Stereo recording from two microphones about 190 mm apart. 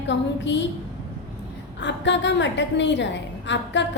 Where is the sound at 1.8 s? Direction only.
65° left (ahead or behind).